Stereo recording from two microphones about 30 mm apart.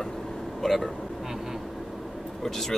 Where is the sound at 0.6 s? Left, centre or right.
Centre.